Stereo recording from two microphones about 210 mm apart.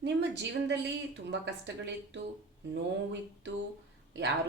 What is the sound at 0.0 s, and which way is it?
A woman's voice, 55° right (ahead or behind).